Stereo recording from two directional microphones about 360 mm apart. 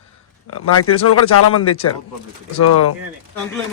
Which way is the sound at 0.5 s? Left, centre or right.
Left.